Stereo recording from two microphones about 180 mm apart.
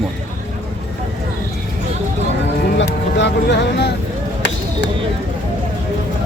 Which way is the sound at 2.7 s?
70° left (ahead or behind).